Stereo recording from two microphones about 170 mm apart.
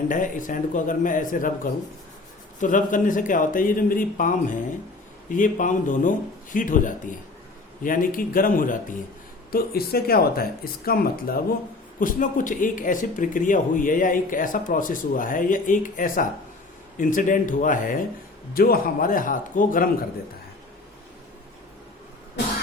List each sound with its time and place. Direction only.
0.1 s speech: 50° left (ahead or behind)
2.6 s speech: 50° left (ahead or behind)
9.5 s speech: 65° left (ahead or behind)